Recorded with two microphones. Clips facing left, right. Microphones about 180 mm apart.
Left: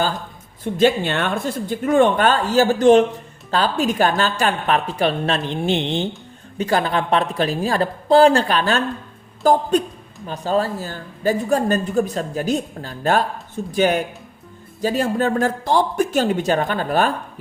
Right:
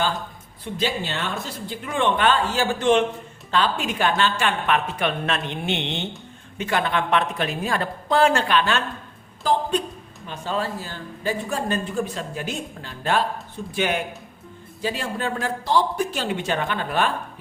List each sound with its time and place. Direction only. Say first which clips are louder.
0.6 s speech: left 9 dB; 50° left (ahead or behind)